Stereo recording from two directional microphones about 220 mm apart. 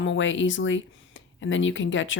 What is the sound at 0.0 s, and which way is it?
Speech, 60° left (ahead or behind).